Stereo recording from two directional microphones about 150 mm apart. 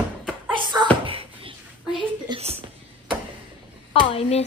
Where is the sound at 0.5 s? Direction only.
30° right (ahead or behind).